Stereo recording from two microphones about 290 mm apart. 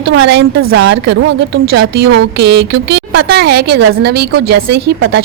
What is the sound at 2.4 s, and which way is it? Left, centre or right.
Speech, right.